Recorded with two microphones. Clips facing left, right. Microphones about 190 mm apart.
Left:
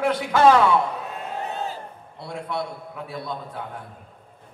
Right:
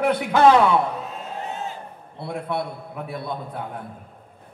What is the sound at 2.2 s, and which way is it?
A man's voice, 55° right (ahead or behind).